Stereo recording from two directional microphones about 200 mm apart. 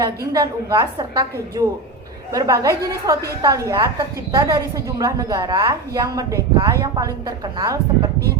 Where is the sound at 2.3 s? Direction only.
15° right (ahead or behind).